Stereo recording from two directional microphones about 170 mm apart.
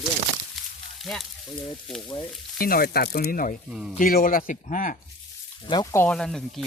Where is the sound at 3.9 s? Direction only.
55° left (ahead or behind).